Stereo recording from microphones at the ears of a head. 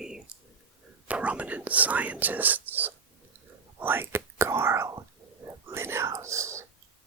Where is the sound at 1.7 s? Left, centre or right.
Right.